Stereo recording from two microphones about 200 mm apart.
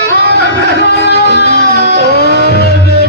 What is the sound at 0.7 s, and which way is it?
Music, 55° right (ahead or behind).